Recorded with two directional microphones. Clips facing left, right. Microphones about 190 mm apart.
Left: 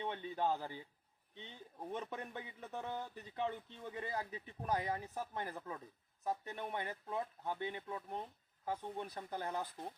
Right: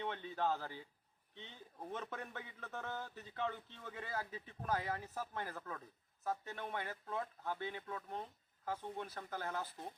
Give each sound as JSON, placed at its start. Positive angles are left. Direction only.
{"t": 0.0, "sound": "speech", "side_deg": 15}
{"t": 1.9, "sound": "speech", "side_deg": 15}